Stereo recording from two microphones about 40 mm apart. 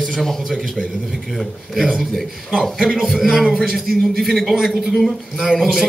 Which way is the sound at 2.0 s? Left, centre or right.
Centre.